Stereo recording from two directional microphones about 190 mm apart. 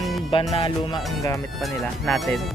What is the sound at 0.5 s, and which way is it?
Music, 25° left (ahead or behind).